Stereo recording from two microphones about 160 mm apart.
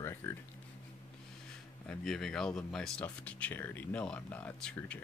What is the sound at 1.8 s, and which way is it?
Speech, 5° left (ahead or behind).